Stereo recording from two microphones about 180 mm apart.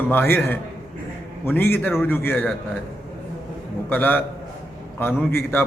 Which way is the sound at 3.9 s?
10° left (ahead or behind).